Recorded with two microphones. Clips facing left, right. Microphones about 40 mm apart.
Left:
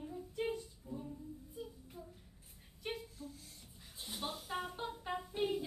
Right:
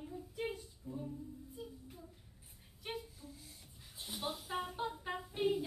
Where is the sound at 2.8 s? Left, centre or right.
Centre.